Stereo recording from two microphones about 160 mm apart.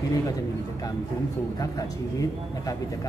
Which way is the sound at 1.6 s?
20° left (ahead or behind).